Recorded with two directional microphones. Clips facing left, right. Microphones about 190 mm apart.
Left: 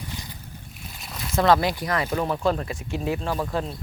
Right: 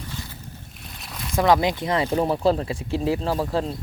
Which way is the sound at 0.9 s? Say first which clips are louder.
Right 1 dB; centre (ahead or behind).